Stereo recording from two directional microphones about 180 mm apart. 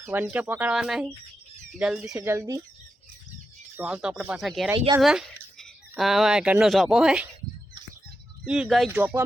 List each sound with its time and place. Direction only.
0.0 s speech: 10° right (ahead or behind)
2.1 s speech: 15° right (ahead or behind)
3.8 s speech: 5° right (ahead or behind)
4.9 s a sound: centre (ahead or behind)
6.0 s speech: centre (ahead or behind)
8.4 s speech: 5° right (ahead or behind)
8.9 s speech: 10° right (ahead or behind)